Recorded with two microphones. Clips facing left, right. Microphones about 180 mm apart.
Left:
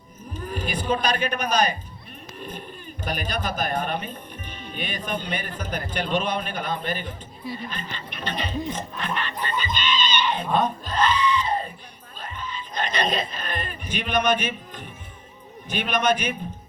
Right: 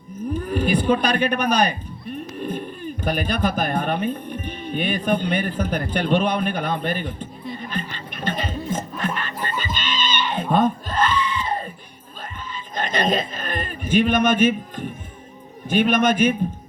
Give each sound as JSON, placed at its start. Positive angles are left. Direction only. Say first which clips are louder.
{"t": 0.3, "sound": "speech", "louder": "right 8 dB", "side_deg": -55}
{"t": 7.7, "sound": "a sound", "louder": "right 5 dB", "side_deg": -50}
{"t": 15.6, "sound": "a man's voice", "louder": "right 5 dB", "side_deg": -50}